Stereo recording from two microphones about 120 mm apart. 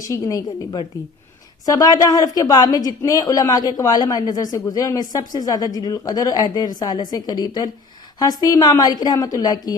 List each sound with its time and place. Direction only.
0.1 s a woman's voice: 30° left (ahead or behind)